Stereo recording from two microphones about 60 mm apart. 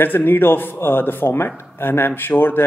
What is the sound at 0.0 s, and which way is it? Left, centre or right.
Speech, left.